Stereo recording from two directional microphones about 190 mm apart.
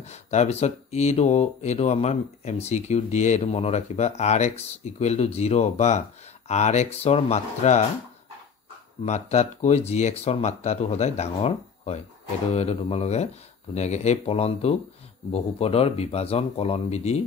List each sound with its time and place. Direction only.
0.0 s speech: 35° left (ahead or behind)
9.0 s speech: 35° left (ahead or behind)